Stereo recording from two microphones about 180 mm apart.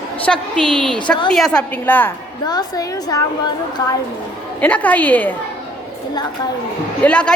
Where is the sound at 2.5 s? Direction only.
20° left (ahead or behind).